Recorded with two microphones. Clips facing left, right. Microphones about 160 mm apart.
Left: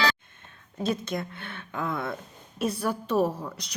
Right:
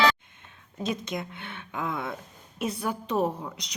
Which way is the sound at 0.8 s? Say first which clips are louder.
Left 2 dB; 15° right (ahead or behind).